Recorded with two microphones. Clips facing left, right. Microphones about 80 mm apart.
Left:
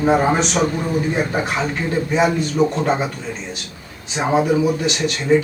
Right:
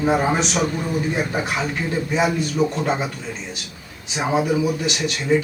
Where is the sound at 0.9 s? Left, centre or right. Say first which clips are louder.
Left 3 dB; left.